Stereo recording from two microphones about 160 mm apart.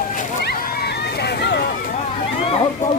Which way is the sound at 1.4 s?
90° left.